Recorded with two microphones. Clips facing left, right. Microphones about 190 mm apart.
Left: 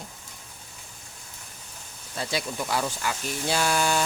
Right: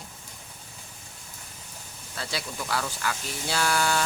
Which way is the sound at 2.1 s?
20° left (ahead or behind).